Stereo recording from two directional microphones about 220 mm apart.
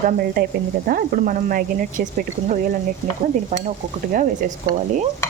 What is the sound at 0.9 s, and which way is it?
A woman's voice, 40° right (ahead or behind).